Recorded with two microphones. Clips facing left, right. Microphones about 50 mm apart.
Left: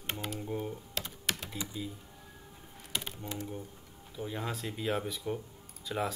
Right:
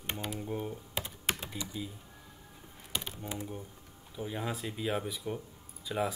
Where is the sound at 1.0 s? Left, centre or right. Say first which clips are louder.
Right 2 dB; centre.